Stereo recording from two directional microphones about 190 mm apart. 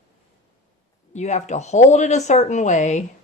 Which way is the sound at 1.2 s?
40° left (ahead or behind).